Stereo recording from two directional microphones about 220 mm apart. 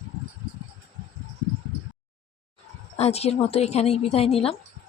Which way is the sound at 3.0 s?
30° left (ahead or behind).